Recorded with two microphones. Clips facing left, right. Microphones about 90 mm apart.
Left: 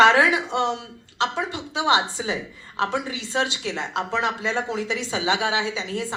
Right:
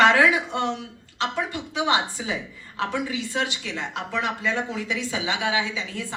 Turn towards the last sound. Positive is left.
turn(degrees=25)  # may be behind; listen again after turning